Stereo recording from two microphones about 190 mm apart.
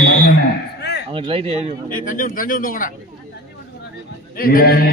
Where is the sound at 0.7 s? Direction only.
60° left (ahead or behind).